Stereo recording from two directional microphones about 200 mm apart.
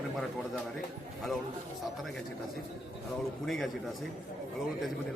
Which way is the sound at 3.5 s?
Centre (ahead or behind).